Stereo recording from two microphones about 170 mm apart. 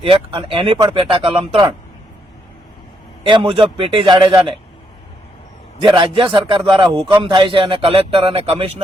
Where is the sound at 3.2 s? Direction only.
30° right (ahead or behind).